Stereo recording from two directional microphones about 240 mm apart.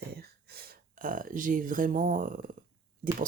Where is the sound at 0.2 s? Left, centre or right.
Right.